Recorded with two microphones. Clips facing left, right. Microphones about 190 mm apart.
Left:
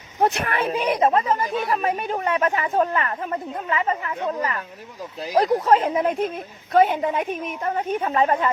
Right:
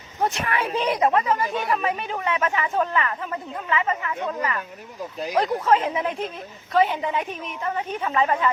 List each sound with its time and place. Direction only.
0.2 s speech: 60° left (ahead or behind)
0.7 s speech: 15° left (ahead or behind)
1.0 s a woman's voice: 30° left (ahead or behind)
5.6 s a woman's voice: 40° left (ahead or behind)